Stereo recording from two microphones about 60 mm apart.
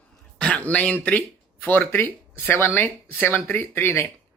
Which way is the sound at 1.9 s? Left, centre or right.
Left.